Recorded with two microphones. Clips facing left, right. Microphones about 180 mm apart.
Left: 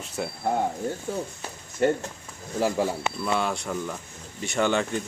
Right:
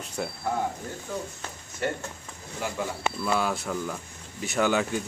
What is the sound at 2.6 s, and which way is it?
Speech, 30° left (ahead or behind).